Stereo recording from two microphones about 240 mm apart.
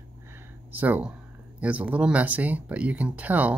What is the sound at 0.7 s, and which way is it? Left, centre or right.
Speech, centre.